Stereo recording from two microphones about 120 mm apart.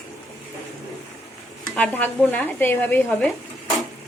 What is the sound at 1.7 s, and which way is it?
Stir, 15° left (ahead or behind).